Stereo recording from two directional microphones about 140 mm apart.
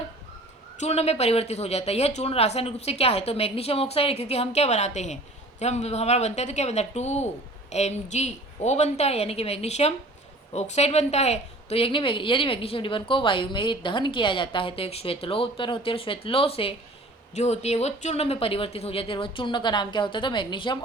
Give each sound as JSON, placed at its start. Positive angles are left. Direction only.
{"t": 0.8, "sound": "a woman's voice", "side_deg": 50}
{"t": 17.3, "sound": "a woman's voice", "side_deg": 50}